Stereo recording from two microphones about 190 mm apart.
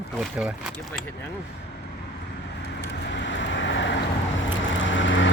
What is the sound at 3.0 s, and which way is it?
Vehicle, 70° left (ahead or behind).